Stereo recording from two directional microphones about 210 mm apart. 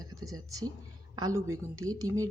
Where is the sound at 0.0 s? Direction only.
15° right (ahead or behind).